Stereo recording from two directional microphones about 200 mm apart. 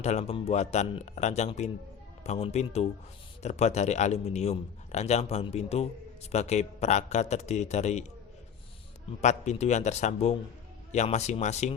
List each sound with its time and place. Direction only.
0.0 s a man's voice: 35° left (ahead or behind)
9.2 s a man's voice: 35° left (ahead or behind)